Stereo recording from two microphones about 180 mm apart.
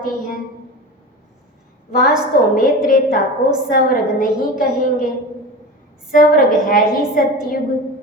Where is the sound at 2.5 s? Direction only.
50° left (ahead or behind).